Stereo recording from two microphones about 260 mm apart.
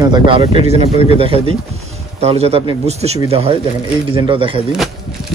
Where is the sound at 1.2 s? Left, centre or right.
Right.